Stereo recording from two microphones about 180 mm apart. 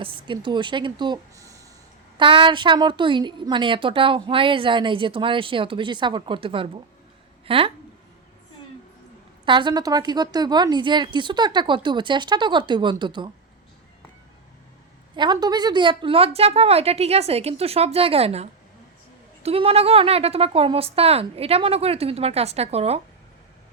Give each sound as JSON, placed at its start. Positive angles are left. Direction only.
{"t": 0.0, "sound": "a woman's voice", "side_deg": -25}
{"t": 9.5, "sound": "a woman's voice", "side_deg": -25}
{"t": 15.1, "sound": "a woman's voice", "side_deg": -25}